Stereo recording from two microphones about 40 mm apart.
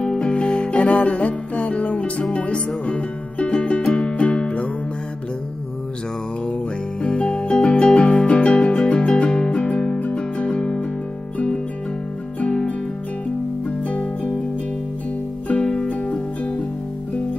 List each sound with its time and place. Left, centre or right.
0.0 s music: left
7.0 s music: left
13.7 s music: left
15.6 s music: left
15.9 s music: left